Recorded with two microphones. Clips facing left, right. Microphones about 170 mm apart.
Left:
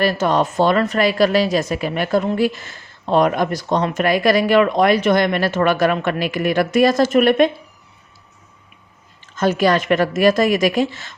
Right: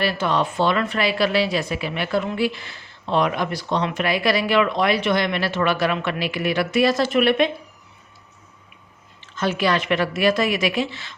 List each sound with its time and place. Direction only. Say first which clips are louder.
0.0 s a woman's voice: left 4 dB; 45° left (ahead or behind)
9.2 s a woman's voice: left 5 dB; 45° left (ahead or behind)